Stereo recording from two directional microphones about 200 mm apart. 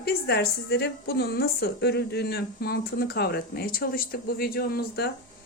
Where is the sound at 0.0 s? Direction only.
55° left (ahead or behind).